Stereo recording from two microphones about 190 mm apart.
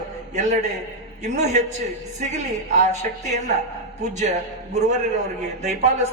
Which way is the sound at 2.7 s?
40° right (ahead or behind).